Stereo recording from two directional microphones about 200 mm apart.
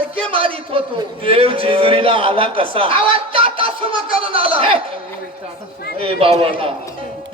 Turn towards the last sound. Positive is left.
turn(degrees=-30)  # may be behind; listen again after turning